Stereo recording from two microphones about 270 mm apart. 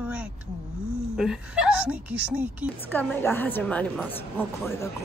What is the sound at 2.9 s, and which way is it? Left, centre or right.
A woman's voice, centre.